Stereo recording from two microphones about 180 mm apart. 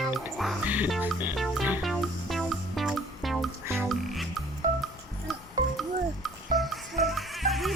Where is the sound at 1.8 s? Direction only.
Centre (ahead or behind).